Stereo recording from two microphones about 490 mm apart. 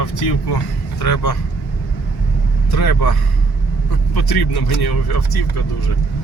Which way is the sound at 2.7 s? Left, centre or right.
Left.